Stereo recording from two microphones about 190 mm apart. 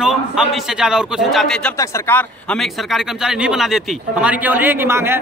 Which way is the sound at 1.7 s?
15° left (ahead or behind).